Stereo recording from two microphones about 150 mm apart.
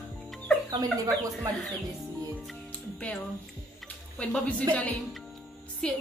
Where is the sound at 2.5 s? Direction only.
5° left (ahead or behind).